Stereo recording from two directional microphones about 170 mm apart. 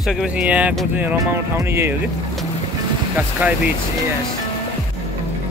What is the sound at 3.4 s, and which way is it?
Speech, 10° right (ahead or behind).